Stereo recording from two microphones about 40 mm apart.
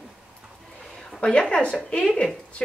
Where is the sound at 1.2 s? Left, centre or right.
Left.